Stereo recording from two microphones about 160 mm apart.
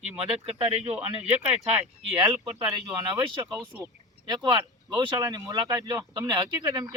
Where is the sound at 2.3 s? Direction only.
25° right (ahead or behind).